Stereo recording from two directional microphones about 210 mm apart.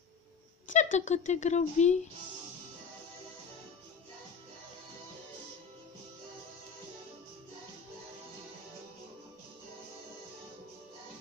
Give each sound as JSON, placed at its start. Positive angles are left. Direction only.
{"t": 0.7, "sound": "speech", "side_deg": 35}